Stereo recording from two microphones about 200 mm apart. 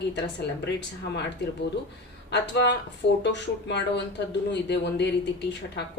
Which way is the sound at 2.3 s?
60° left (ahead or behind).